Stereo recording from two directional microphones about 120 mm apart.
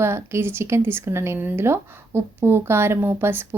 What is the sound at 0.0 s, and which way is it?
Speech, 20° right (ahead or behind).